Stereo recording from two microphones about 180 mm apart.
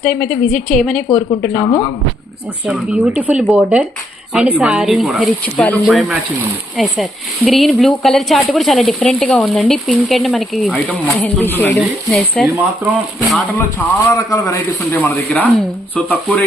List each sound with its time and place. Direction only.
0.0 s speech: 5° left (ahead or behind)
2.6 s speech: 5° right (ahead or behind)
11.2 s speech: 10° left (ahead or behind)
12.1 s speech: centre (ahead or behind)
12.5 s speech: 15° right (ahead or behind)
13.6 s speech: 15° left (ahead or behind)